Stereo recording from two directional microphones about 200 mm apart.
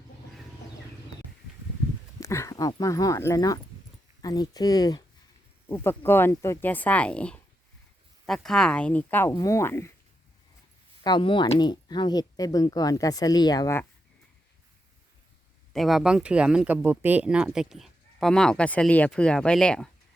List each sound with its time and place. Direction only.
2.2 s speech: 15° left (ahead or behind)
11.0 s speech: 25° left (ahead or behind)
15.7 s speech: centre (ahead or behind)